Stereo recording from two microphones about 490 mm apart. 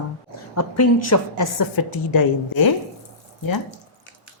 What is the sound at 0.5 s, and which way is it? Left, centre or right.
A woman's voice, left.